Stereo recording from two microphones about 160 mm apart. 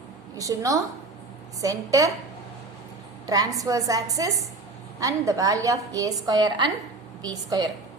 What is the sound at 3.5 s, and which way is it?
A woman's voice, 20° right (ahead or behind).